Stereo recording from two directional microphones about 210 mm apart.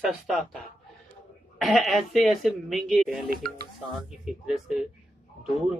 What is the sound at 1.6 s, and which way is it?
Speech, centre (ahead or behind).